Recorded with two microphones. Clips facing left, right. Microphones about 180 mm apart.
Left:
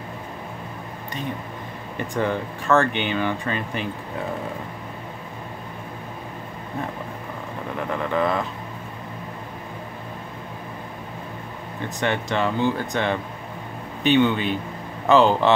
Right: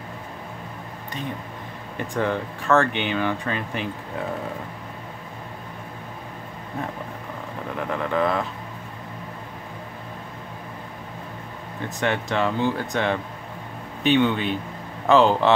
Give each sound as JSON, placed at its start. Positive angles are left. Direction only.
{"t": 2.0, "sound": "speech", "side_deg": 0}
{"t": 7.9, "sound": "speech", "side_deg": 0}
{"t": 12.0, "sound": "speech", "side_deg": 0}